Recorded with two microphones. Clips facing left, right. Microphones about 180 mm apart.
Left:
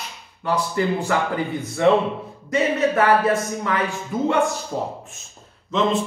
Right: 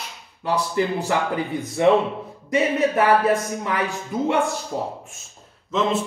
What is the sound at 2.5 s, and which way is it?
Speech, 15° right (ahead or behind).